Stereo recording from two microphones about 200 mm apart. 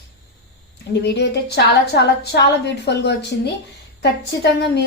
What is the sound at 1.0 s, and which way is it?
A woman's voice, 55° left (ahead or behind).